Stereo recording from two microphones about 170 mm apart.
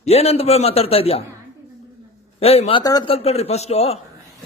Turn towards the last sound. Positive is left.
turn(degrees=35)  # may be behind; listen again after turning